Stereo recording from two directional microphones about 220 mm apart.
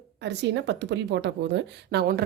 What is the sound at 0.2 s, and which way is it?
A woman's voice, 50° right (ahead or behind).